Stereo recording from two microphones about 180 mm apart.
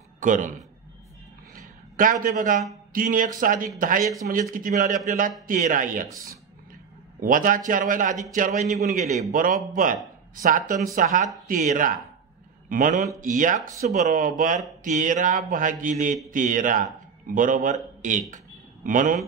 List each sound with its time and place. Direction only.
0.2 s a man's voice: 45° right (ahead or behind)
1.5 s a sound: 50° right (ahead or behind)
2.2 s speech: 50° right (ahead or behind)
7.2 s a man's voice: 50° right (ahead or behind)